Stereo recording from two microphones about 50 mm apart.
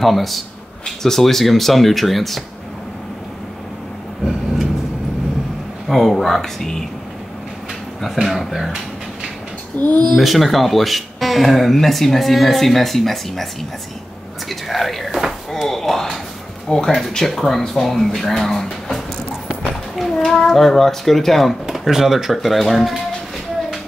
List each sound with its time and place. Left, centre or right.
0.0 s speech: centre
5.9 s speech: centre
8.3 s speech: centre
9.8 s speech: left
10.1 s speech: centre